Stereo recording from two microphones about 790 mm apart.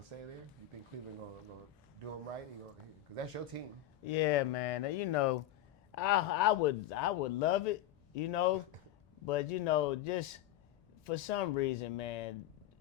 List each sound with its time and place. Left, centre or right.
4.0 s speech: left
5.9 s speech: left